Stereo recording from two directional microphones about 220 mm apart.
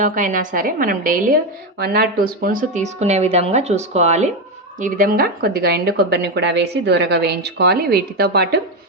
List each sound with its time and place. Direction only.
0.0 s a woman's voice: 35° right (ahead or behind)